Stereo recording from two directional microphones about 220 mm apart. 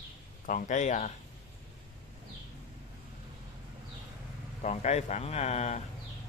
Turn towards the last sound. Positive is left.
turn(degrees=30)  # may be behind; listen again after turning